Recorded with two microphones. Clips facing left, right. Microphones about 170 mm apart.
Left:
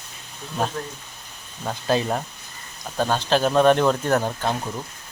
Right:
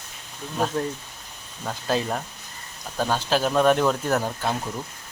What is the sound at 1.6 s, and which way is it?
Speech, 5° left (ahead or behind).